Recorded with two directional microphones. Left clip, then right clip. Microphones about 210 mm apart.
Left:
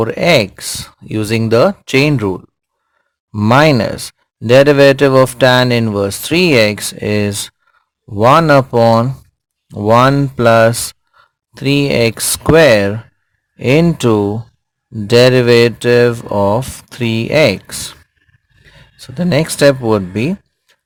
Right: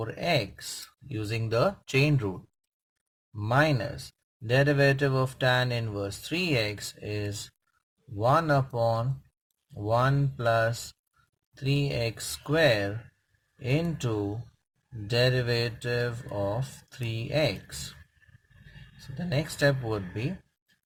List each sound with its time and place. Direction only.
0.0 s speech: 45° left (ahead or behind)
3.3 s speech: 45° left (ahead or behind)
19.0 s speech: 40° left (ahead or behind)